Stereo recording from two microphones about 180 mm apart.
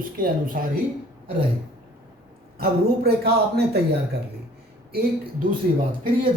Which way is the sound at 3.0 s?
65° right (ahead or behind).